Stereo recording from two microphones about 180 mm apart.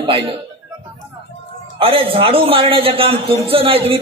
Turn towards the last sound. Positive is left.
turn(degrees=-30)  # may be behind; listen again after turning